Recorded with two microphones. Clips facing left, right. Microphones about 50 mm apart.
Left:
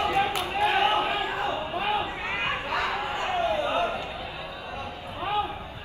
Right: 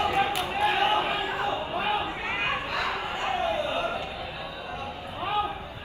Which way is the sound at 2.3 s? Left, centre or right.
Right.